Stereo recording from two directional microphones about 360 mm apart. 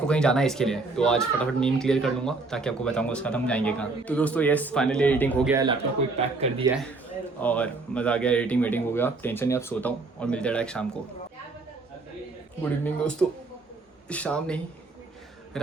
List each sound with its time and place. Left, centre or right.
0.0 s speech: centre
5.5 s speech: centre
7.3 s speech: centre
12.6 s speech: centre